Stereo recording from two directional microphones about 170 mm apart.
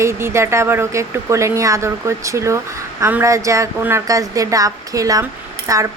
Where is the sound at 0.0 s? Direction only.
15° right (ahead or behind).